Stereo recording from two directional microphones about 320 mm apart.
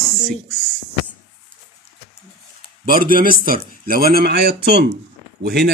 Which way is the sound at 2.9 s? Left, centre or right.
Right.